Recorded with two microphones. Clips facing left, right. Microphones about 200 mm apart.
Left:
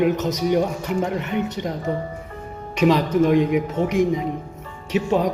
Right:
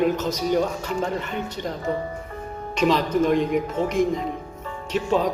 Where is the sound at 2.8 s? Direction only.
10° left (ahead or behind).